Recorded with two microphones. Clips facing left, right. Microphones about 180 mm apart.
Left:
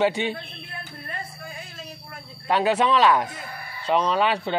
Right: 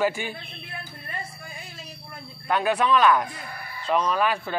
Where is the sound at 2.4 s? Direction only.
25° left (ahead or behind).